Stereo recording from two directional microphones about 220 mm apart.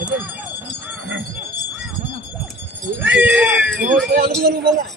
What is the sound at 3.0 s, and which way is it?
Speech, 5° right (ahead or behind).